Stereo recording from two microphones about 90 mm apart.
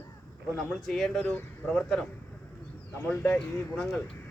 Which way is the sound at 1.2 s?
20° left (ahead or behind).